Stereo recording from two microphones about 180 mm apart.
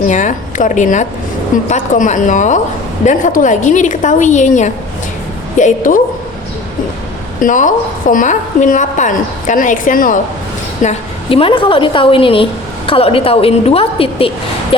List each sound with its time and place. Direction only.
0.1 s a woman's voice: 45° left (ahead or behind)
7.4 s a woman's voice: 45° left (ahead or behind)
10.8 s a woman's voice: 30° left (ahead or behind)